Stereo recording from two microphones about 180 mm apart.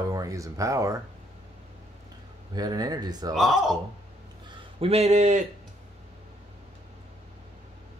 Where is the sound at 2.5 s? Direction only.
20° right (ahead or behind).